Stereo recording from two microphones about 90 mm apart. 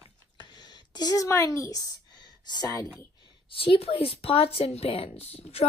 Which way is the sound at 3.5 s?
90° left.